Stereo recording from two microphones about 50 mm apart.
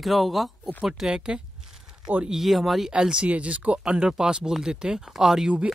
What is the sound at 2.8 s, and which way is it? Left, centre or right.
Speech, centre.